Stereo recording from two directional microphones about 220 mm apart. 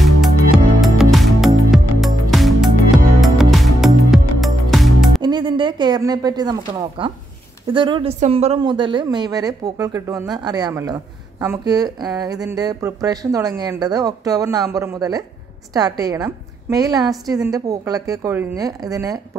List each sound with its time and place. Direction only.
0.7 s music: centre (ahead or behind)
5.2 s a woman's voice: 20° right (ahead or behind)